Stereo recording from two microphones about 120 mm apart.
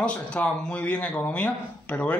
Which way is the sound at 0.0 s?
10° left (ahead or behind).